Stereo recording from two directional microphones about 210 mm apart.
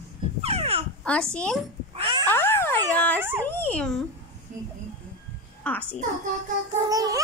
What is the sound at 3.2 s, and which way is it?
Speech, 10° right (ahead or behind).